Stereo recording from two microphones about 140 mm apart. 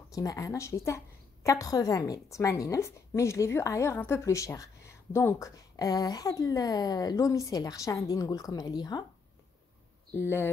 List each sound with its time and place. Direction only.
0.1 s a woman's voice: 25° left (ahead or behind)
10.1 s speech: 15° left (ahead or behind)